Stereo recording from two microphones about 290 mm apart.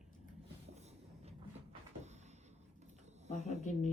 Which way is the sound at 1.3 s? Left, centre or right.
Right.